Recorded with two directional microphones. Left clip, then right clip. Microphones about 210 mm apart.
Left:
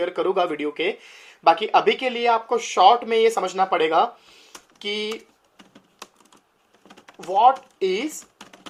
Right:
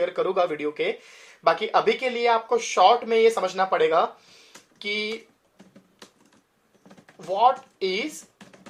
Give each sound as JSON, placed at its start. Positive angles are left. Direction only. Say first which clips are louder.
{"t": 0.0, "sound": "speech", "louder": "left 1 dB", "side_deg": 30}
{"t": 7.3, "sound": "speech", "louder": "left 4 dB", "side_deg": 30}